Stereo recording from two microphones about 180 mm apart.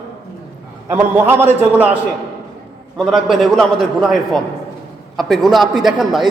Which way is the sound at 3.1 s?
Centre (ahead or behind).